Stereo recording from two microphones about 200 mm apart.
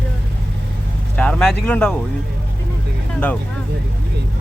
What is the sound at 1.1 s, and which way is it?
Vehicle, 5° left (ahead or behind).